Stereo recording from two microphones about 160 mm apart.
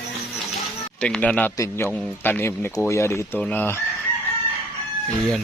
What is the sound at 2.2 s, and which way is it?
Speech, 10° left (ahead or behind).